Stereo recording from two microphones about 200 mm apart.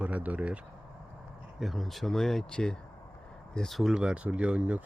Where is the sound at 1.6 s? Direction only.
Centre (ahead or behind).